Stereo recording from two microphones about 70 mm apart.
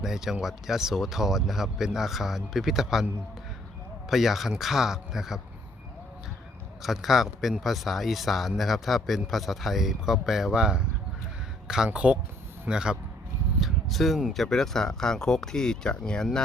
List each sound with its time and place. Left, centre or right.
0.0 s speech: centre
4.1 s speech: centre
6.8 s speech: centre
11.9 s a man's voice: centre
13.6 s speech: centre